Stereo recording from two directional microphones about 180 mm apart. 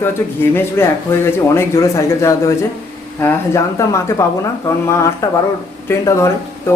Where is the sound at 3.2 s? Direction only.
15° left (ahead or behind).